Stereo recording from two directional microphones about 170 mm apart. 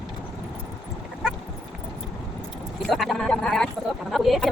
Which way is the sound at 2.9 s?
Centre (ahead or behind).